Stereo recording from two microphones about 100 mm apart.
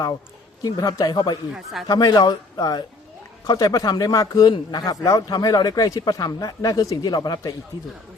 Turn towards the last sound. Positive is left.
turn(degrees=35)  # may be behind; listen again after turning